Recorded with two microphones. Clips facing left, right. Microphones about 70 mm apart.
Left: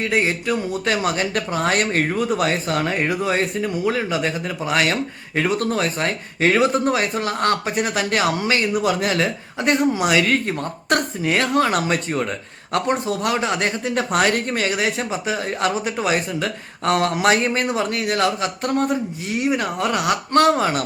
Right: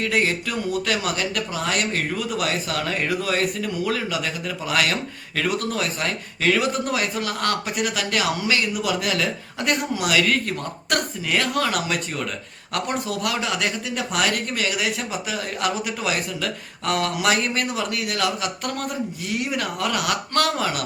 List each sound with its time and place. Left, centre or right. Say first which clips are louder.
0.0 s speech: left 2 dB; left